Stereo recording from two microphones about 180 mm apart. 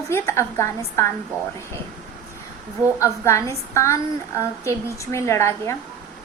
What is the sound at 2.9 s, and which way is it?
A woman's voice, 15° left (ahead or behind).